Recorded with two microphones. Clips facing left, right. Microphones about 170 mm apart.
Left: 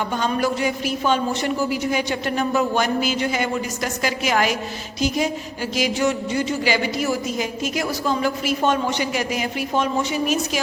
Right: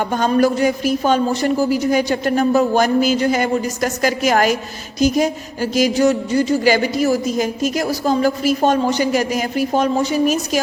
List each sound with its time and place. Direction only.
0.1 s a woman's voice: 45° right (ahead or behind)
4.9 s music: 45° right (ahead or behind)
5.7 s a woman's voice: 40° right (ahead or behind)